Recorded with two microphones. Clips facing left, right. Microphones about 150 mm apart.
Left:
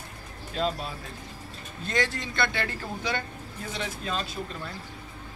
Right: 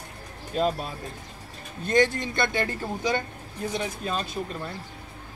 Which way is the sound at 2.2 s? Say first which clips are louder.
Right 3 dB; 15° right (ahead or behind).